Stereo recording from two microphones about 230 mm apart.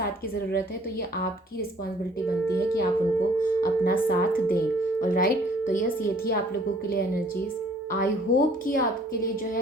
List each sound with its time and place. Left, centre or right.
2.7 s speech: left
7.9 s speech: left